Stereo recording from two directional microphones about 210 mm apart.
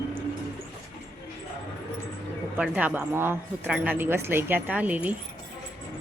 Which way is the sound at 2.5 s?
5° right (ahead or behind).